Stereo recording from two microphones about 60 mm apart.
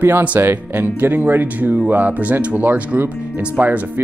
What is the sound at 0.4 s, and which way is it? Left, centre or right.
Speech, right.